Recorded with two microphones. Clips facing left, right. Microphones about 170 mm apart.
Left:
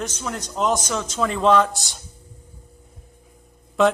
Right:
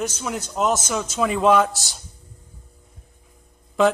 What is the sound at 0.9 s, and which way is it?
Speech, 10° right (ahead or behind).